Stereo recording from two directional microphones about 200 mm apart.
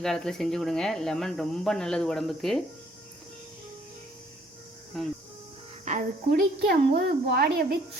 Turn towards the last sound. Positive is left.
turn(degrees=-50)  # may be behind; listen again after turning